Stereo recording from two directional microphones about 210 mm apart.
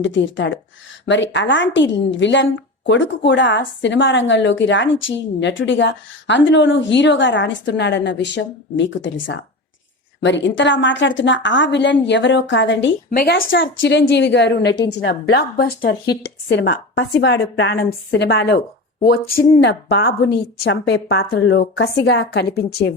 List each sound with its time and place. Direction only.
0.0 s a woman's voice: 60° left (ahead or behind)
13.1 s a woman's voice: 45° left (ahead or behind)
13.5 s a woman's voice: 60° left (ahead or behind)
19.6 s a woman's voice: 55° left (ahead or behind)